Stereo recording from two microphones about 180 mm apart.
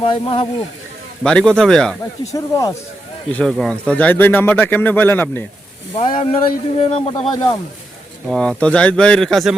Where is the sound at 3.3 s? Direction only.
5° left (ahead or behind).